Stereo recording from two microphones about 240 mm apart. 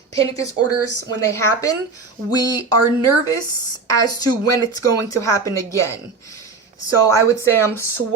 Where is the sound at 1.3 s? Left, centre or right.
Centre.